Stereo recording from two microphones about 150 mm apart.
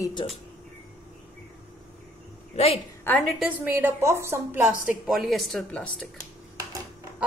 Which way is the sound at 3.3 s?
10° right (ahead or behind).